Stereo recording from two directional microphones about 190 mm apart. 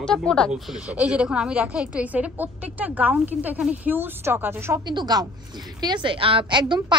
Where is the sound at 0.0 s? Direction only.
5° left (ahead or behind).